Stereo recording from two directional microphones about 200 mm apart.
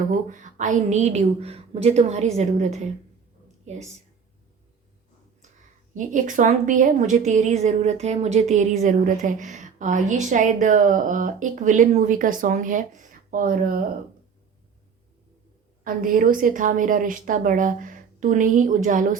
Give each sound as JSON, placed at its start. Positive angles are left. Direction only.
{"t": 0.1, "sound": "a woman's voice", "side_deg": -40}
{"t": 5.9, "sound": "a woman's voice", "side_deg": -40}
{"t": 15.8, "sound": "a woman's voice", "side_deg": -45}